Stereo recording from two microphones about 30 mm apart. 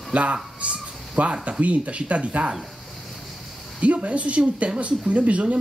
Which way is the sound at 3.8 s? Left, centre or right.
Right.